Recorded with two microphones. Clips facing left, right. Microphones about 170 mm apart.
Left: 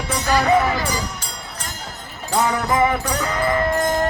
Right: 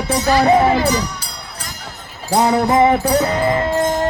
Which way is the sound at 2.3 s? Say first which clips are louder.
Right 5 dB; 35° right (ahead or behind).